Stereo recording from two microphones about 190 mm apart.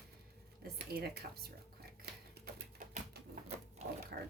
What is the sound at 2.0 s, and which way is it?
Typewriter, 55° right (ahead or behind).